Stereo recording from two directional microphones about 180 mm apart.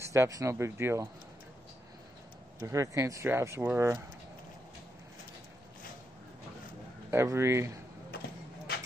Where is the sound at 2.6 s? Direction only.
15° right (ahead or behind).